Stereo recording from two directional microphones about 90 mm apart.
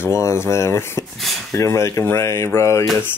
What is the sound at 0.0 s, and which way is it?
Speech, 30° left (ahead or behind).